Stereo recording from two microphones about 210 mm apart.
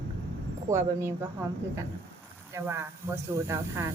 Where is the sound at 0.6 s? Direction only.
10° right (ahead or behind).